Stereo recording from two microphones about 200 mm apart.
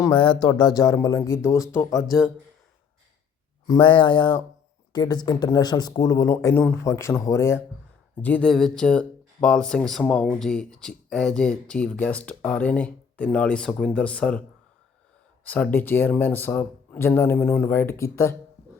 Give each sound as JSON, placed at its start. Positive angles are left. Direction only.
{"t": 0.0, "sound": "speech", "side_deg": 25}
{"t": 3.7, "sound": "speech", "side_deg": 25}
{"t": 15.4, "sound": "speech", "side_deg": 5}